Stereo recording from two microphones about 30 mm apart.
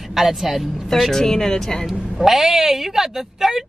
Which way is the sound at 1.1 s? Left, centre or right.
Centre.